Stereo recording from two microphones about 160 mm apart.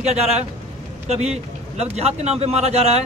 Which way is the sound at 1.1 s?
40° right (ahead or behind).